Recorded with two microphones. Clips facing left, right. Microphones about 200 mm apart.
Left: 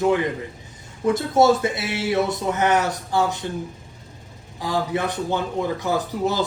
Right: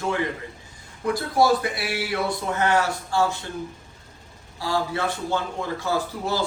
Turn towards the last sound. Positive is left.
turn(degrees=20)  # may be behind; listen again after turning